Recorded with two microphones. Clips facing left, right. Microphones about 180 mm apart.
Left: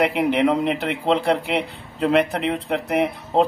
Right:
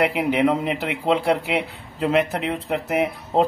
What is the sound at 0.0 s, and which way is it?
A man's voice, centre (ahead or behind).